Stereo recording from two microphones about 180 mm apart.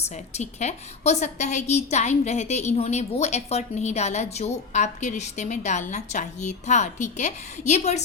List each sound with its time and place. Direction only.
0.0 s a woman's voice: 40° left (ahead or behind)